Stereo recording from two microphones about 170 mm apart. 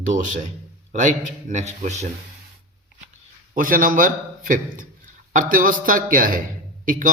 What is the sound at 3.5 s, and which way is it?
A man's voice, 55° right (ahead or behind).